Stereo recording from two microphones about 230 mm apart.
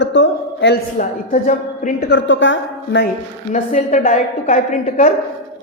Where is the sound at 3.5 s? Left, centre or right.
Left.